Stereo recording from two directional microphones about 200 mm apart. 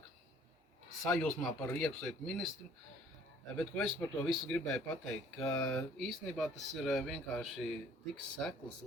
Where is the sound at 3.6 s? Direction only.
Centre (ahead or behind).